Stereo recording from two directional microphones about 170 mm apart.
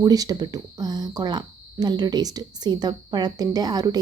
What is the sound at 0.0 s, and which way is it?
Speech, 20° right (ahead or behind).